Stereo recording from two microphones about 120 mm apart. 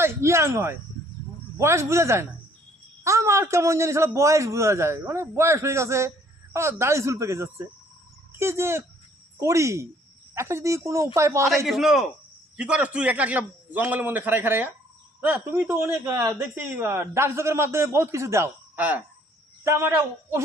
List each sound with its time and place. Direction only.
0.0 s a man's voice: 20° right (ahead or behind)
11.6 s a man's voice: 5° right (ahead or behind); by 20.4 s 20° right (ahead or behind)